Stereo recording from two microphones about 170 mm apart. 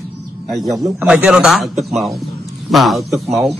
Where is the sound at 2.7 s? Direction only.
Centre (ahead or behind).